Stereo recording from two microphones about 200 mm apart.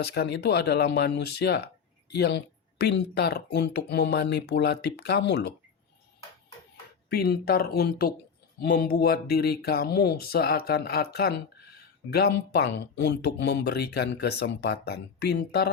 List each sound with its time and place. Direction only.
0.0 s speech: 55° left (ahead or behind)
7.1 s speech: 50° left (ahead or behind)